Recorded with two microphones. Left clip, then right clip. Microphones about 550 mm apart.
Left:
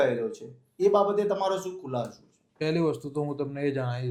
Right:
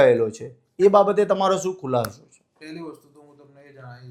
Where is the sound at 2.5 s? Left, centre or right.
Left.